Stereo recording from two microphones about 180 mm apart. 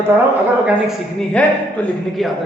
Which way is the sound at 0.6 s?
Centre (ahead or behind).